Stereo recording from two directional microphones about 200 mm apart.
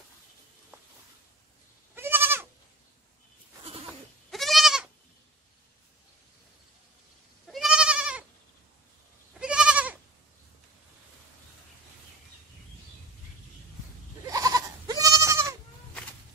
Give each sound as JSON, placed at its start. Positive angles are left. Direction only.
{"t": 2.0, "sound": "goat", "side_deg": -10}
{"t": 4.3, "sound": "goat", "side_deg": 0}
{"t": 7.4, "sound": "goat", "side_deg": 0}
{"t": 9.4, "sound": "goat", "side_deg": -5}
{"t": 14.3, "sound": "goat", "side_deg": -20}